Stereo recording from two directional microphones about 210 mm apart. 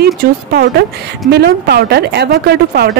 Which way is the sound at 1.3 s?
50° right (ahead or behind).